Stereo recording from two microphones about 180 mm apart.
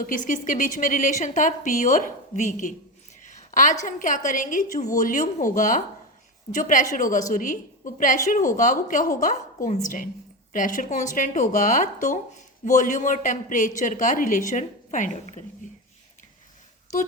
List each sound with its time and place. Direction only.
0.0 s a woman's voice: 50° left (ahead or behind)
3.2 s a sound: 45° left (ahead or behind)
3.8 s a woman's voice: 45° left (ahead or behind)